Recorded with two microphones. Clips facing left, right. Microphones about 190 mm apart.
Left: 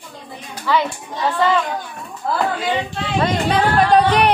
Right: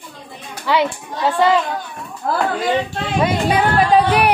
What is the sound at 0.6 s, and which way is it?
Speech, 15° right (ahead or behind).